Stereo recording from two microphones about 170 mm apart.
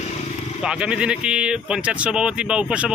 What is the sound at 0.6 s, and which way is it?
Speech, 5° right (ahead or behind).